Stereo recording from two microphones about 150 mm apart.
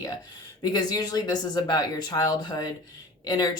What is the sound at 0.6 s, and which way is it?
Speech, 25° left (ahead or behind).